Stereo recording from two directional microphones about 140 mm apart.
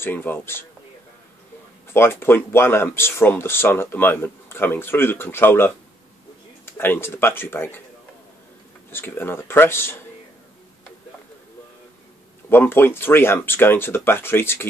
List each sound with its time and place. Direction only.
0.0 s speech: 15° left (ahead or behind)
2.0 s speech: 15° left (ahead or behind)
8.9 s speech: 15° left (ahead or behind)
12.4 s speech: 15° left (ahead or behind)